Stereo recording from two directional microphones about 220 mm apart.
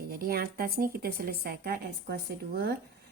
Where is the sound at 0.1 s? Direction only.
45° right (ahead or behind).